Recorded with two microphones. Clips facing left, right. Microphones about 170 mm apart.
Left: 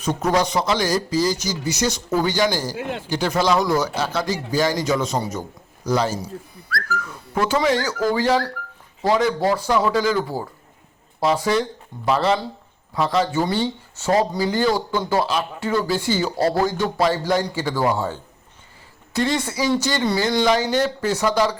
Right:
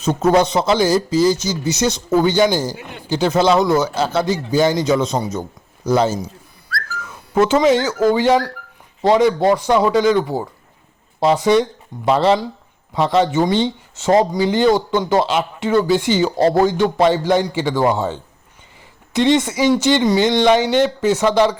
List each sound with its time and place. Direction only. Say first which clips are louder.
0.0 s speech: right 6 dB; 25° right (ahead or behind)
2.7 s speech: left 7 dB; 90° left
3.1 s speech: right 5 dB; 25° right (ahead or behind)
7.3 s speech: right 6 dB; 25° right (ahead or behind)